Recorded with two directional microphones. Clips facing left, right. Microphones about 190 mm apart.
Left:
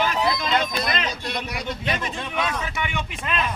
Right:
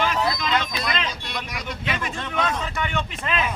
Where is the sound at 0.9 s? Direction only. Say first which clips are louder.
Left 2 dB; 40° left (ahead or behind).